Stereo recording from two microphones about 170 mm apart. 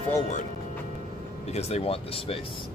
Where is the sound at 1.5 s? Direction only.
40° left (ahead or behind).